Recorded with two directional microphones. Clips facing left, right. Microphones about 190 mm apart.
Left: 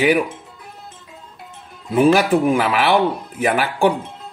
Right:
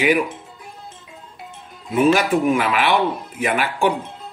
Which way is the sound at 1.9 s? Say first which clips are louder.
Left 2 dB; 35° left (ahead or behind).